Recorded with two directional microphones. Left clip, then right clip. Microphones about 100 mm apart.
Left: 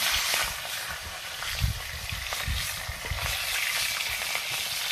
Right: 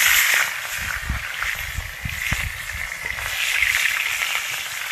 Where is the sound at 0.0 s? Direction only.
25° left (ahead or behind).